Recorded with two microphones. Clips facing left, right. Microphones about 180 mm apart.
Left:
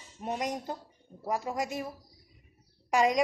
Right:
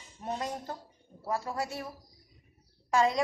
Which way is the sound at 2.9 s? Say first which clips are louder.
Left 1 dB; 15° left (ahead or behind).